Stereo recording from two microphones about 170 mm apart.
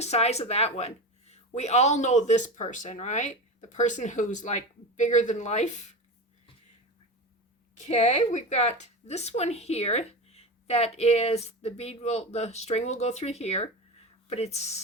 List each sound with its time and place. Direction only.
0.0 s speech: 40° left (ahead or behind)
7.8 s a woman's voice: 40° left (ahead or behind)